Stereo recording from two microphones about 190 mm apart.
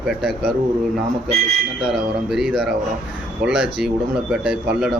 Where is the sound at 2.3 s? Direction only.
5° right (ahead or behind).